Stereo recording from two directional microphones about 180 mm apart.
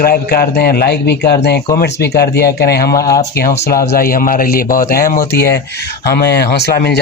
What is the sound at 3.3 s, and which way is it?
Speech, 65° left (ahead or behind).